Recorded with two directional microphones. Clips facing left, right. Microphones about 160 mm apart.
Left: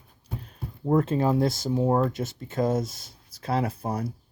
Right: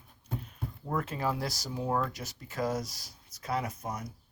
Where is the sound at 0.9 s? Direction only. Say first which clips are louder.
Left 10 dB; 30° left (ahead or behind).